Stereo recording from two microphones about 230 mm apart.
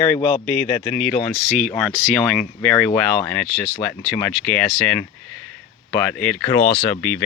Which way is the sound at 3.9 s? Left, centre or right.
Centre.